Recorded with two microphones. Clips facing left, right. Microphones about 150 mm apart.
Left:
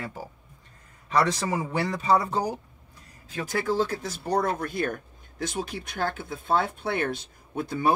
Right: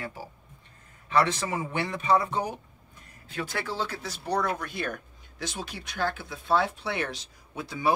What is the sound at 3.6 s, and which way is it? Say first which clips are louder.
Speech: left 10 dB; 50° left (ahead or behind).